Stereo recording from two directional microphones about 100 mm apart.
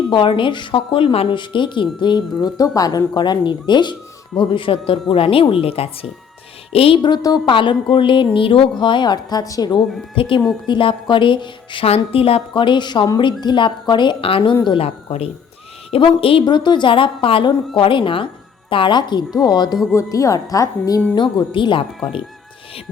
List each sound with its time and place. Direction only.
0.1 s speech: 55° left (ahead or behind)
1.4 s speech: 55° left (ahead or behind)
7.1 s a woman's voice: 40° left (ahead or behind)
7.4 s speech: 55° left (ahead or behind)
8.8 s speech: 50° left (ahead or behind)
10.2 s speech: 60° left (ahead or behind)
11.9 s speech: 70° left (ahead or behind)
14.5 s speech: 50° left (ahead or behind)
14.8 s speech: 90° left
15.9 s speech: 65° left (ahead or behind); by 19.8 s 45° left (ahead or behind)
19.9 s a woman's voice: 30° left (ahead or behind)
21.2 s speech: 50° left (ahead or behind)